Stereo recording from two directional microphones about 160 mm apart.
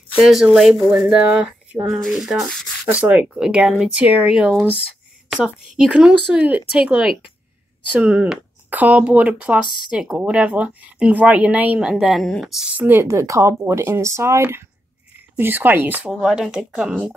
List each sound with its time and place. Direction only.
0.2 s speech: 5° right (ahead or behind)
2.9 s speech: 10° right (ahead or behind)
12.8 s speech: 15° right (ahead or behind)